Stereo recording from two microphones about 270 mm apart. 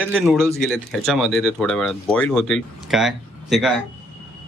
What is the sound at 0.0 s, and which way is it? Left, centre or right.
Speech, centre.